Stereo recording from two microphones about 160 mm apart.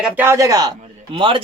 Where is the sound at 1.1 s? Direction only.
30° right (ahead or behind).